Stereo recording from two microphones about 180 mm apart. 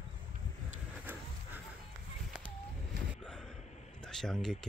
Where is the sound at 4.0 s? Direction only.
5° left (ahead or behind).